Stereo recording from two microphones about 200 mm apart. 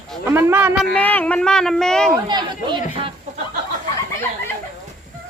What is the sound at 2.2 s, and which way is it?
Speech, 20° right (ahead or behind).